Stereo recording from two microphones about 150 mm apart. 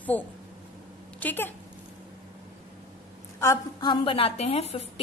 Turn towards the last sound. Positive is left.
turn(degrees=40)  # may be behind; listen again after turning